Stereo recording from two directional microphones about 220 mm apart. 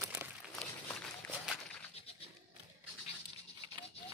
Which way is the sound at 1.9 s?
25° left (ahead or behind).